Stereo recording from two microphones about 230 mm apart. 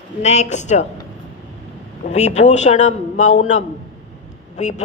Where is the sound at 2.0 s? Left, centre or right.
Left.